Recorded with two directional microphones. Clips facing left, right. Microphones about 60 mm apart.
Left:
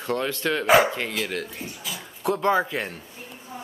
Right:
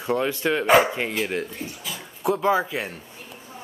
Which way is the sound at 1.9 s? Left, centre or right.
Centre.